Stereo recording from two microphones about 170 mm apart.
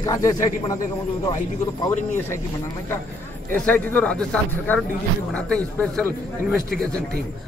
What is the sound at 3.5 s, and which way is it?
A man's voice, 10° left (ahead or behind).